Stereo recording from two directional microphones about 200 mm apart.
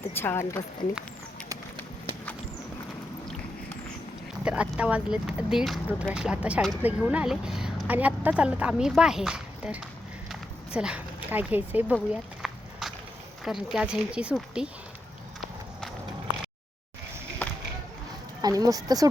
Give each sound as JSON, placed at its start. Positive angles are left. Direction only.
{"t": 0.1, "sound": "a woman's voice", "side_deg": 10}
{"t": 1.5, "sound": "run", "side_deg": -25}
{"t": 4.4, "sound": "speech", "side_deg": -5}
{"t": 10.2, "sound": "a sound", "side_deg": -5}
{"t": 11.9, "sound": "walk", "side_deg": 0}
{"t": 13.4, "sound": "speech", "side_deg": 0}
{"t": 17.4, "sound": "a sound", "side_deg": 5}
{"t": 18.4, "sound": "speech", "side_deg": -20}